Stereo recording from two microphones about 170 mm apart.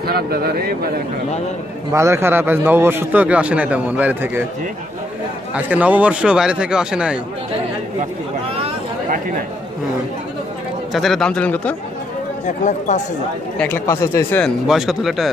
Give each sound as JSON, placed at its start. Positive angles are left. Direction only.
{"t": 0.0, "sound": "speech", "side_deg": -65}
{"t": 1.9, "sound": "a man's voice", "side_deg": -15}
{"t": 5.5, "sound": "a man's voice", "side_deg": -10}
{"t": 10.9, "sound": "a man's voice", "side_deg": 0}
{"t": 12.4, "sound": "speech", "side_deg": 45}
{"t": 13.6, "sound": "speech", "side_deg": 15}
{"t": 14.4, "sound": "a man's voice", "side_deg": 0}